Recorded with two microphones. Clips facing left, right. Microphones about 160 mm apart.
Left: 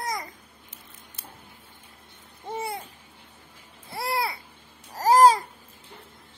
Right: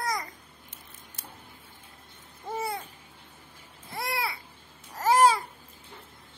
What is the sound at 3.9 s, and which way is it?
Babbling, 35° left (ahead or behind).